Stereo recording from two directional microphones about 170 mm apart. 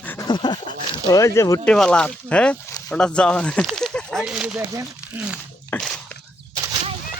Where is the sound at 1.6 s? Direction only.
5° left (ahead or behind).